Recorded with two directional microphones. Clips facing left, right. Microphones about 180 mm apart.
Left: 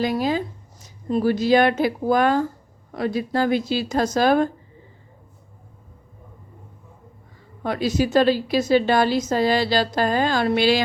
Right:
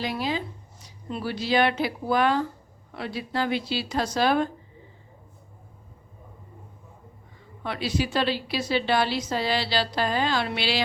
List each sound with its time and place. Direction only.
0.0 s a woman's voice: 45° left (ahead or behind)
7.6 s a woman's voice: 45° left (ahead or behind)